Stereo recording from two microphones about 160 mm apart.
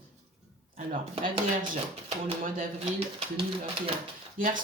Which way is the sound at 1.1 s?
30° right (ahead or behind).